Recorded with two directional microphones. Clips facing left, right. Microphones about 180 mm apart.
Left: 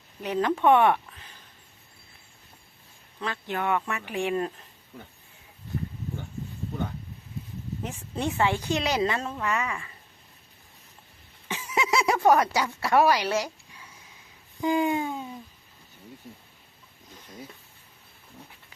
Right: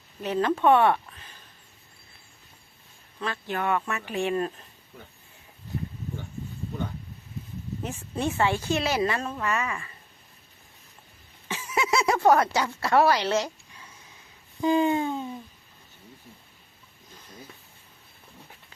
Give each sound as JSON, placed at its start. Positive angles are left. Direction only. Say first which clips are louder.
{"t": 0.2, "sound": "speech", "louder": "right 1 dB", "side_deg": 15}
{"t": 3.2, "sound": "speech", "louder": "right 1 dB", "side_deg": 20}
{"t": 7.8, "sound": "speech", "louder": "right 1 dB", "side_deg": 20}
{"t": 11.4, "sound": "a sound", "louder": "even", "side_deg": 15}
{"t": 14.6, "sound": "speech", "louder": "right 2 dB", "side_deg": 15}